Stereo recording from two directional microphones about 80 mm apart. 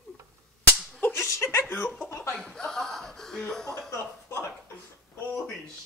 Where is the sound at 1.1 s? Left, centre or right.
Left.